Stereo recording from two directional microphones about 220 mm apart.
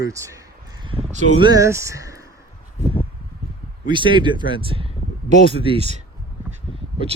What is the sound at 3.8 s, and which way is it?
Speech, 20° right (ahead or behind).